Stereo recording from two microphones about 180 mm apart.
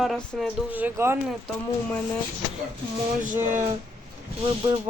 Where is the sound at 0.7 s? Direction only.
10° right (ahead or behind).